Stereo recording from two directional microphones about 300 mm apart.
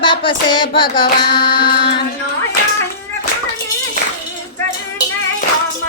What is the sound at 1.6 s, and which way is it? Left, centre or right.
Music, left.